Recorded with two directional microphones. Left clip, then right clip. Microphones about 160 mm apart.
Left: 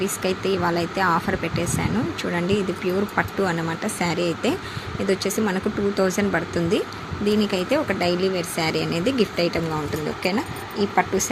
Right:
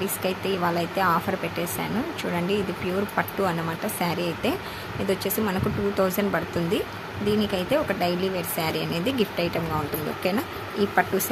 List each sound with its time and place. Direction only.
0.0 s speech: 5° left (ahead or behind)